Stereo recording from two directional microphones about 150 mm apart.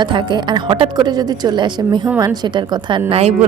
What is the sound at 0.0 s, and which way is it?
A woman's voice, 30° right (ahead or behind).